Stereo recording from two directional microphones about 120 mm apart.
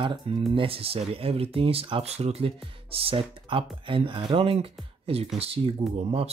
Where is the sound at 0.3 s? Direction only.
55° right (ahead or behind).